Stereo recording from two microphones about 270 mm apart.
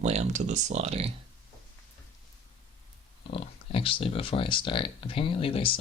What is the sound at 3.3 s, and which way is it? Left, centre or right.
Speech, left.